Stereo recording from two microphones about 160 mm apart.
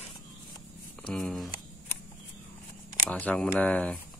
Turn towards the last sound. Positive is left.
turn(degrees=10)  # may be behind; listen again after turning